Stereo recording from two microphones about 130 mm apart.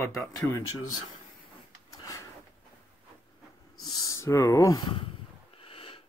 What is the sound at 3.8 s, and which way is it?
Speech, 30° left (ahead or behind).